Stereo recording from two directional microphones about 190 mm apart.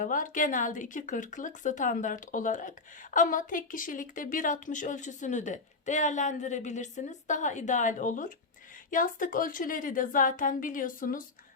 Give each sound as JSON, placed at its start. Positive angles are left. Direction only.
{"t": 0.0, "sound": "speech", "side_deg": 45}